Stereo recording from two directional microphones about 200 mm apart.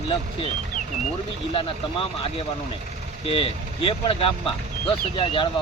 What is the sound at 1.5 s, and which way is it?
Speech, 25° left (ahead or behind).